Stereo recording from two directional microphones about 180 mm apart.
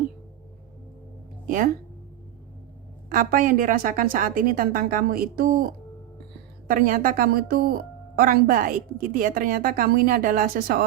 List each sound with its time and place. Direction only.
1.5 s a woman's voice: 50° right (ahead or behind)
3.1 s a woman's voice: 50° right (ahead or behind)
6.7 s a woman's voice: 50° right (ahead or behind)